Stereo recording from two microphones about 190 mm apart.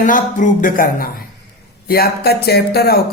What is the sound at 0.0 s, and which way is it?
Speech, 40° left (ahead or behind).